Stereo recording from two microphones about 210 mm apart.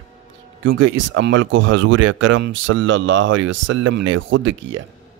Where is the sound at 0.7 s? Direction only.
60° right (ahead or behind).